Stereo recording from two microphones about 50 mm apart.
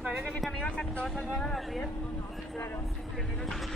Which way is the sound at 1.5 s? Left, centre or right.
Centre.